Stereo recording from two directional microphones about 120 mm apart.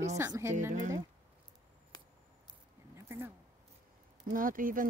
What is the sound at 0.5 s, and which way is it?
Speech, 90° right.